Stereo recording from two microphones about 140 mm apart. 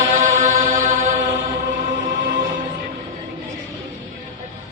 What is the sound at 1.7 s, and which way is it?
Music, 85° right.